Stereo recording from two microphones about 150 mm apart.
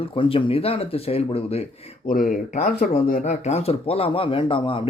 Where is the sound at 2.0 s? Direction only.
70° left (ahead or behind).